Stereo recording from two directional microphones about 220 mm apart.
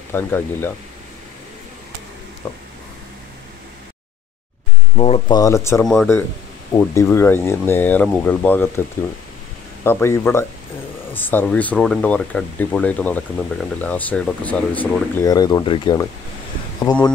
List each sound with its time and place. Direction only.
0.1 s speech: 10° left (ahead or behind)
2.4 s speech: 10° left (ahead or behind)
4.9 s speech: 25° left (ahead or behind)
5.4 s speech: 15° left (ahead or behind)
9.8 s speech: 10° left (ahead or behind)